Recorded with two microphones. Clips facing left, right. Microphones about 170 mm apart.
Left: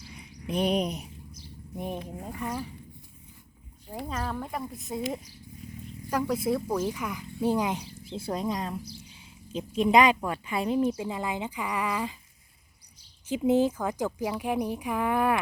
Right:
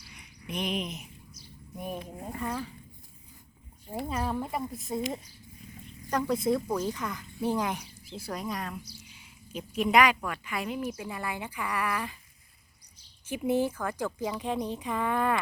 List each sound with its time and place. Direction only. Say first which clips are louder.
0.1 s a sound: left 6 dB; 30° left (ahead or behind)
2.4 s speech: even; 15° left (ahead or behind)
3.9 s speech: right 2 dB; 10° right (ahead or behind); by 7.9 s 15° left (ahead or behind)
8.1 s speech: left 5 dB; 25° left (ahead or behind)
13.2 s speech: left 4 dB; 15° left (ahead or behind)